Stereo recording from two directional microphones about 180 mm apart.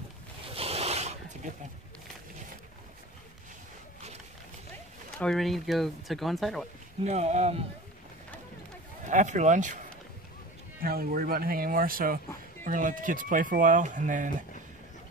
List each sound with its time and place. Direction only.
0.6 s a sound: 35° right (ahead or behind)
5.2 s speech: centre (ahead or behind)
7.0 s speech: 35° right (ahead or behind)
9.0 s speech: 45° right (ahead or behind)
10.8 s speech: 55° right (ahead or behind)